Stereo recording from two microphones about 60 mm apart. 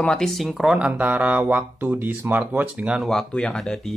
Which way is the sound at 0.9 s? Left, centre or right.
Right.